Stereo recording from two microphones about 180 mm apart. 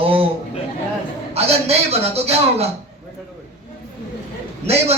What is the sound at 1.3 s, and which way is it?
Speech, 35° right (ahead or behind).